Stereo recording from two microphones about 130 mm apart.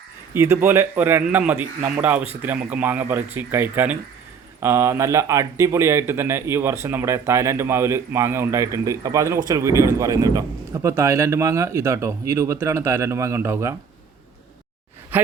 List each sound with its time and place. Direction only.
0.3 s a man's voice: 20° right (ahead or behind)
15.1 s speech: 15° right (ahead or behind)